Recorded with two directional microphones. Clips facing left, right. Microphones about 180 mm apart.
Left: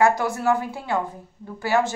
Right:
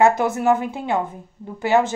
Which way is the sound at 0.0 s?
20° right (ahead or behind).